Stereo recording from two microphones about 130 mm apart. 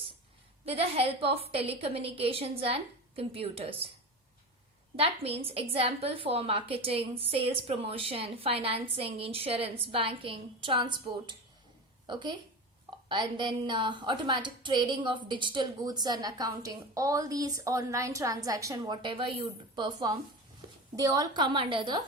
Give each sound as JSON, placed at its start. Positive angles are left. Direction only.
{"t": 0.6, "sound": "a woman's voice", "side_deg": -50}
{"t": 4.9, "sound": "a woman's voice", "side_deg": -50}
{"t": 19.0, "sound": "a woman's voice", "side_deg": -40}